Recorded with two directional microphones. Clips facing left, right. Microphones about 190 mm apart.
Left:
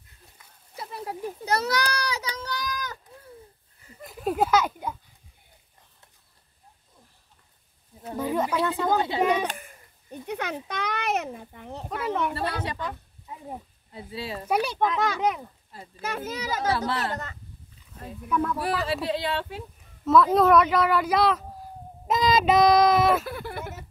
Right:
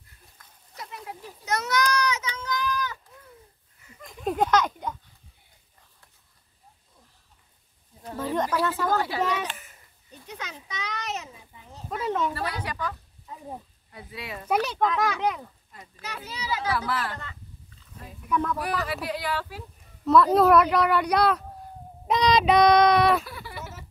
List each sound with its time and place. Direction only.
0.7 s a sound: 35° left (ahead or behind)
4.0 s a sound: 5° left (ahead or behind)
8.1 s speech: 15° left (ahead or behind)
9.3 s a child's voice: 55° left (ahead or behind)
12.4 s speech: 25° left (ahead or behind)
13.9 s speech: 30° left (ahead or behind)
14.5 s a child's voice: 10° left (ahead or behind)
16.0 s a child's voice: 50° left (ahead or behind)
16.7 s speech: 25° left (ahead or behind)
17.1 s a child's voice: 45° left (ahead or behind)
18.3 s speech: 5° left (ahead or behind)
18.6 s speech: 30° left (ahead or behind)
20.1 s speech: centre (ahead or behind)
23.2 s a sound: 55° left (ahead or behind)